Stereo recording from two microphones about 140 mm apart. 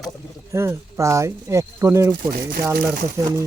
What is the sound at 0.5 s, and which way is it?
Speech, 20° right (ahead or behind).